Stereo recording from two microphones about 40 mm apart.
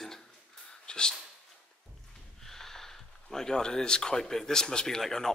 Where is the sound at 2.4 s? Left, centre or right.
Centre.